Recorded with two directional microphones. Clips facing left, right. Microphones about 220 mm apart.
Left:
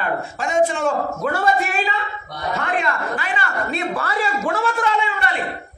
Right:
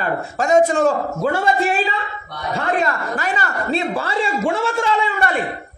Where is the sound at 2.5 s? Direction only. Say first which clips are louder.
Right 3 dB; 40° right (ahead or behind).